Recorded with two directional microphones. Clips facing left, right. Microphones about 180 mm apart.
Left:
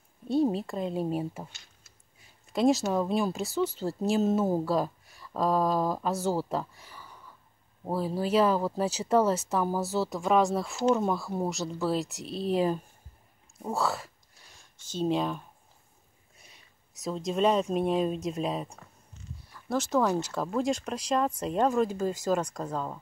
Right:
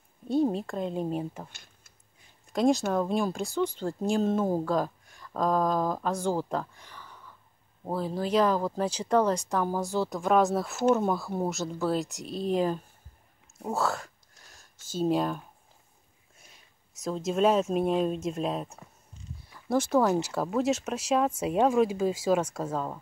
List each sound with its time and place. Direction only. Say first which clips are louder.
0.3 s speech: even; centre (ahead or behind)
1.5 s tick-tock: right 2 dB; 55° right (ahead or behind)
2.5 s speech: even; centre (ahead or behind)
13.7 s a sound: right 1 dB; centre (ahead or behind)
14.8 s speech: right 2 dB; 5° right (ahead or behind)
16.9 s speech: right 1 dB; centre (ahead or behind)
19.7 s speech: right 2 dB; 10° right (ahead or behind)